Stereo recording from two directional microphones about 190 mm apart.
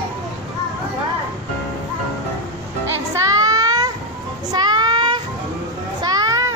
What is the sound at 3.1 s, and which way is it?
Child singing, 20° right (ahead or behind).